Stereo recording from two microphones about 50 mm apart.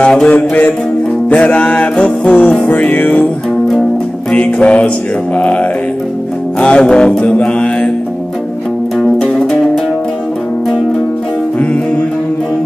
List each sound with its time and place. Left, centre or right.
0.0 s music: centre
0.3 s music: left
4.4 s music: left